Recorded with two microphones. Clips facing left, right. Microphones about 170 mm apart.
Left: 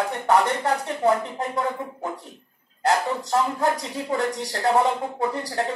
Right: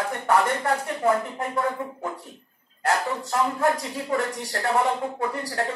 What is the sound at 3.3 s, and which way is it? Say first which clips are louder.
Speech: even; 20° left (ahead or behind).